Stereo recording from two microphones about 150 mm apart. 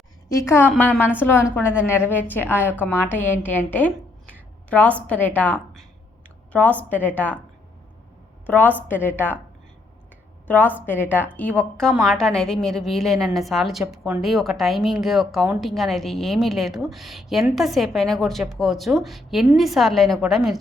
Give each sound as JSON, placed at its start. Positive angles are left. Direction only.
{"t": 0.3, "sound": "a woman's voice", "side_deg": 20}
{"t": 8.4, "sound": "a woman's voice", "side_deg": 10}
{"t": 10.4, "sound": "a woman's voice", "side_deg": 10}